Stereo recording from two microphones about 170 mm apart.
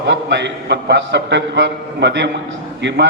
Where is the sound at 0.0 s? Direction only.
90° right.